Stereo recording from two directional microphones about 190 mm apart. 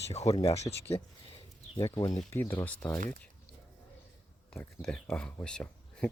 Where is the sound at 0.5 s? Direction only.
15° left (ahead or behind).